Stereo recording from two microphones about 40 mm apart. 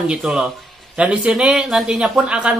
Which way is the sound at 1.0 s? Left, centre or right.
Right.